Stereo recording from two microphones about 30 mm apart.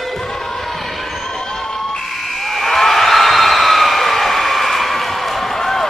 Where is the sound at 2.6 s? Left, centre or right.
Centre.